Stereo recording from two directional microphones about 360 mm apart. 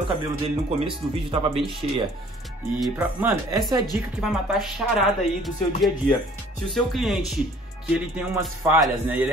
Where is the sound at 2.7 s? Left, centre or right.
Centre.